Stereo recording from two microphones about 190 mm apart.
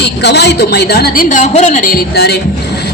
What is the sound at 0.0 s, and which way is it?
Speech, 60° left (ahead or behind).